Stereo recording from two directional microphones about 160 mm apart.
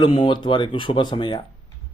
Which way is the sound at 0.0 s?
30° left (ahead or behind).